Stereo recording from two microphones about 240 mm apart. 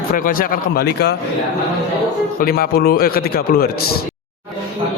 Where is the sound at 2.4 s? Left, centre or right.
Left.